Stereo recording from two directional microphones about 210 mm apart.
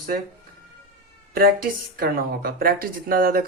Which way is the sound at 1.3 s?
45° right (ahead or behind).